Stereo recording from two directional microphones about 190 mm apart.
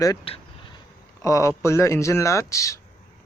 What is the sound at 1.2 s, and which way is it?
Speech, 15° left (ahead or behind).